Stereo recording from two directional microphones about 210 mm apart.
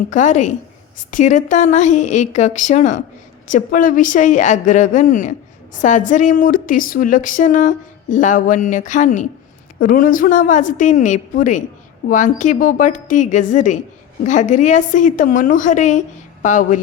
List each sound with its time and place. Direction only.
0.1 s speech: 35° left (ahead or behind)